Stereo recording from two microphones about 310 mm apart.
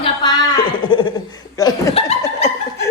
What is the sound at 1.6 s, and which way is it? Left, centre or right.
Laughter, centre.